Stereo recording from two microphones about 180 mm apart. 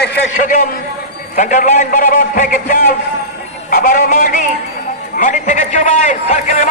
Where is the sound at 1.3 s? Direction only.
45° left (ahead or behind).